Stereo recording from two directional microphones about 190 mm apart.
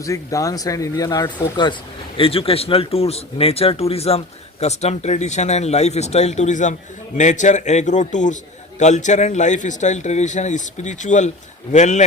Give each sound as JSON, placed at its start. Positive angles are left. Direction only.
{"t": 0.0, "sound": "a man's voice", "side_deg": 15}